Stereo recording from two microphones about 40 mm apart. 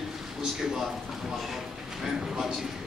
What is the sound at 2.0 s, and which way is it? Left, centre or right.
Speech, centre.